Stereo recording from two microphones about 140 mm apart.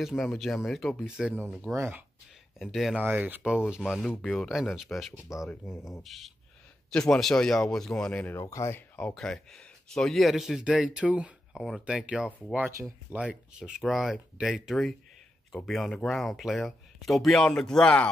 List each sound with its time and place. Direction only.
0.0 s speech: centre (ahead or behind)
1.7 s speech: 15° right (ahead or behind)
2.6 s speech: centre (ahead or behind)
3.1 s speech: 15° right (ahead or behind); by 8.4 s 10° left (ahead or behind)
8.4 s speech: 20° left (ahead or behind)